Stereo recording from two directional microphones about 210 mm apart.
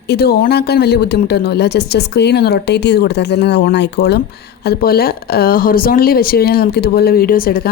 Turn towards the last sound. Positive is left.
turn(degrees=45)  # may be behind; listen again after turning